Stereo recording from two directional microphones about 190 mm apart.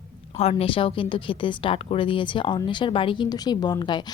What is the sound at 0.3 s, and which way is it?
A woman's voice, 30° left (ahead or behind).